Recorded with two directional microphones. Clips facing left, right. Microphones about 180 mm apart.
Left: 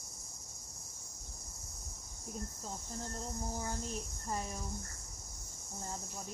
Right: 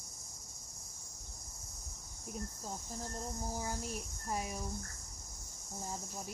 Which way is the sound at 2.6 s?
10° right (ahead or behind).